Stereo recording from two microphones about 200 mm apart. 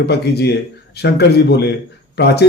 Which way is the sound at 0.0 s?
55° left (ahead or behind).